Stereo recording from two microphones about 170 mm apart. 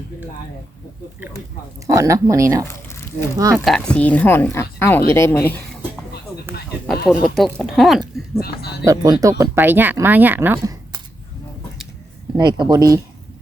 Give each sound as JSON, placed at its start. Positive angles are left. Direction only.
{"t": 1.9, "sound": "speech", "side_deg": -20}
{"t": 3.5, "sound": "speech", "side_deg": 0}
{"t": 6.8, "sound": "speech", "side_deg": -5}
{"t": 8.4, "sound": "speech", "side_deg": 70}
{"t": 8.8, "sound": "speech", "side_deg": -20}
{"t": 10.6, "sound": "scissors", "side_deg": -25}
{"t": 12.4, "sound": "speech", "side_deg": -25}